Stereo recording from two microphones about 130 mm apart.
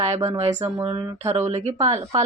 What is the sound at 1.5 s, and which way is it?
Speech, 60° right (ahead or behind).